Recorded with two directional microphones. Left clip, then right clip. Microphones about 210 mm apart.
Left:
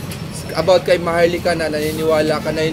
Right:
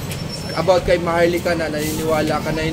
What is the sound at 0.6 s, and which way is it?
Speech, 45° left (ahead or behind).